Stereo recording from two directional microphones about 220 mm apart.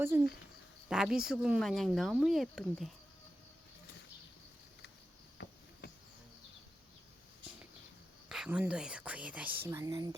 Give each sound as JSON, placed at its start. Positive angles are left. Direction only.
{"t": 0.1, "sound": "speech", "side_deg": -10}
{"t": 5.8, "sound": "bee", "side_deg": 45}
{"t": 8.3, "sound": "speech", "side_deg": -5}